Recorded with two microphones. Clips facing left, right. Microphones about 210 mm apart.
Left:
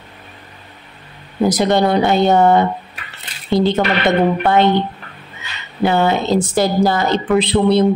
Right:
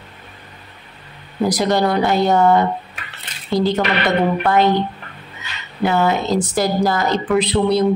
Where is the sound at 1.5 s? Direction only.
25° left (ahead or behind).